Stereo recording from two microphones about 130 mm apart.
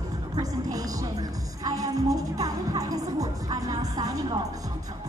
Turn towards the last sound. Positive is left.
turn(degrees=-30)  # may be behind; listen again after turning